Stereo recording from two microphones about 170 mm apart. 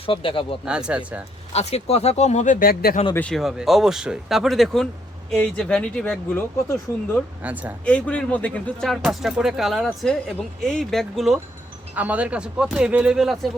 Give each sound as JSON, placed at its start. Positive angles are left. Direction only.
{"t": 0.0, "sound": "speech", "side_deg": 30}
{"t": 0.6, "sound": "speech", "side_deg": -5}
{"t": 1.5, "sound": "speech", "side_deg": 40}
{"t": 3.2, "sound": "speech", "side_deg": 5}
{"t": 7.4, "sound": "speech", "side_deg": -10}
{"t": 7.9, "sound": "speech", "side_deg": 5}